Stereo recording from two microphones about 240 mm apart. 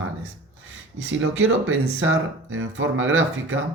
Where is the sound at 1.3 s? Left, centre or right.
Right.